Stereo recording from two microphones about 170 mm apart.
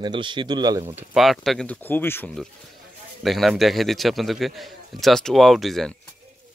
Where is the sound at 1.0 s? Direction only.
Centre (ahead or behind).